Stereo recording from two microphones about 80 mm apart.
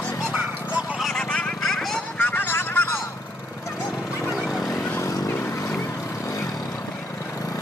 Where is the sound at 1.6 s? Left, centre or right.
Centre.